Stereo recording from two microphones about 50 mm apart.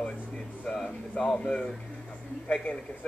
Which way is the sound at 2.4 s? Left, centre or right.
Left.